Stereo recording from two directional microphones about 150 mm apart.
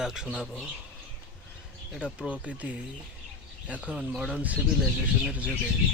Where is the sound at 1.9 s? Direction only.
5° right (ahead or behind).